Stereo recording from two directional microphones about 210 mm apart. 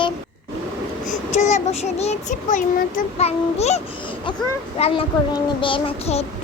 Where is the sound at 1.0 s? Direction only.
35° left (ahead or behind).